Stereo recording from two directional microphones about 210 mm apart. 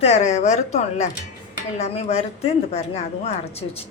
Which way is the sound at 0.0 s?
30° left (ahead or behind).